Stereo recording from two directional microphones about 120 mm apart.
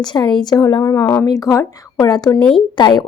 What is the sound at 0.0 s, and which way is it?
A woman's voice, 35° left (ahead or behind).